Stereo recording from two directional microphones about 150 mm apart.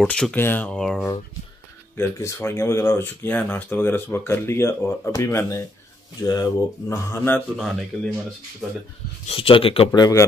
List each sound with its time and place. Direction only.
0.0 s speech: 5° left (ahead or behind)
2.0 s speech: 20° left (ahead or behind)
7.5 s speech: centre (ahead or behind)
9.2 s speech: 40° left (ahead or behind)
9.9 s speech: 25° left (ahead or behind)